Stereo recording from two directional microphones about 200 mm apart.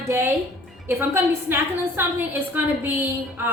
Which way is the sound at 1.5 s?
10° right (ahead or behind).